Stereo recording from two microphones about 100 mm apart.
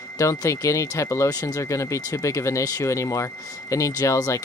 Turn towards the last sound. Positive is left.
turn(degrees=30)  # may be behind; listen again after turning